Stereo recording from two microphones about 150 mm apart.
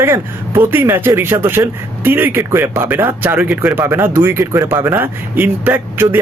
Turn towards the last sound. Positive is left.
turn(degrees=-15)  # may be behind; listen again after turning